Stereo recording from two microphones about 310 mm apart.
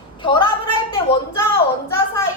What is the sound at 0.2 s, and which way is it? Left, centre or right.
Speech, centre.